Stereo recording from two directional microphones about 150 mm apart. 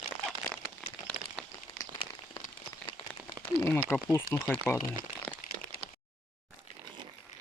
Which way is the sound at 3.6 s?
15° left (ahead or behind).